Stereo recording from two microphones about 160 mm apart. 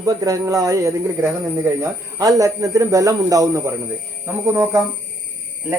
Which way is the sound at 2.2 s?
20° right (ahead or behind).